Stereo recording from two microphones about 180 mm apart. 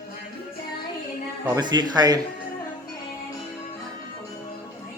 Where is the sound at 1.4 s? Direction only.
20° right (ahead or behind).